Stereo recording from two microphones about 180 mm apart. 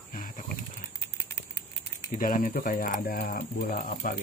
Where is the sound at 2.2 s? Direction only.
50° left (ahead or behind).